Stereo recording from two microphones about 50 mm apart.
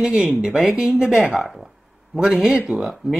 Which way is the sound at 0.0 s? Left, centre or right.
Centre.